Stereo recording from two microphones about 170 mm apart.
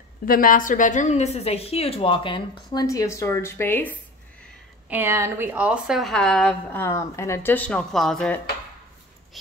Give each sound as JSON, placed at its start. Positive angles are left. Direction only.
{"t": 0.2, "sound": "a woman's voice", "side_deg": 55}
{"t": 4.8, "sound": "a woman's voice", "side_deg": -10}